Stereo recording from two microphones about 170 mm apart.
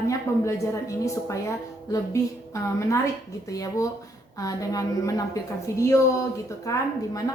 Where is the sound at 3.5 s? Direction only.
20° left (ahead or behind).